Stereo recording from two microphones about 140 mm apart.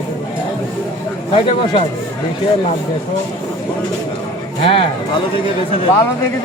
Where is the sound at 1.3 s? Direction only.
45° left (ahead or behind).